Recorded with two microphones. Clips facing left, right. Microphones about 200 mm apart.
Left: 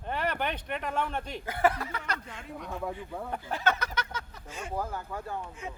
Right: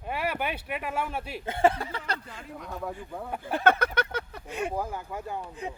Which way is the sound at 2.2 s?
Centre (ahead or behind).